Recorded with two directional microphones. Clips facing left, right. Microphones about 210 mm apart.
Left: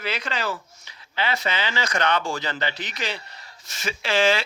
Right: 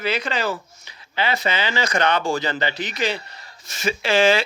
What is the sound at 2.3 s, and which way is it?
Speech, 10° right (ahead or behind).